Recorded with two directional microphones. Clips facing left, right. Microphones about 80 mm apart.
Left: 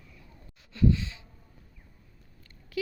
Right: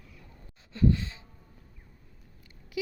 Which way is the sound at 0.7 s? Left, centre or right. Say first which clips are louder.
Even; right.